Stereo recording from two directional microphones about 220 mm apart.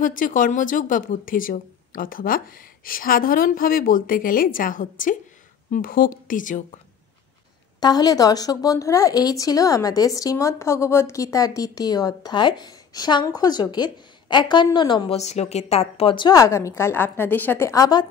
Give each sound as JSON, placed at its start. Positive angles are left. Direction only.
{"t": 0.0, "sound": "a woman's voice", "side_deg": 35}
{"t": 7.8, "sound": "speech", "side_deg": 15}